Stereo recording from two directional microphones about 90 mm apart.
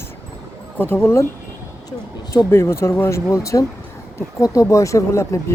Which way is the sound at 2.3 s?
30° left (ahead or behind).